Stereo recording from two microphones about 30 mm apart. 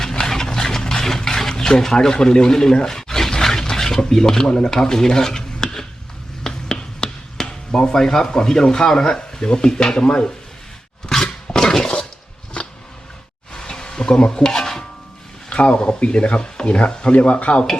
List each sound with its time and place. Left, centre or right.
0.0 s a sound: centre
1.8 s speech: left
2.8 s a sound: centre
4.7 s stir: centre
6.5 s finger snapping: left
7.4 s chop: left
7.9 s speech: centre
11.5 s dishes: centre
13.5 s stir: left
15.4 s a sound: left
16.0 s speech: left